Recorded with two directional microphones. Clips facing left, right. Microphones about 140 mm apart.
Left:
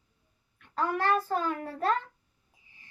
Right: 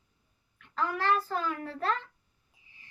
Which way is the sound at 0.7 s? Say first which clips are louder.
Left 2 dB; 45° left (ahead or behind).